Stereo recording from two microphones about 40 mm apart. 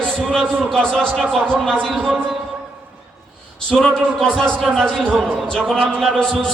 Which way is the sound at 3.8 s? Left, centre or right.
Centre.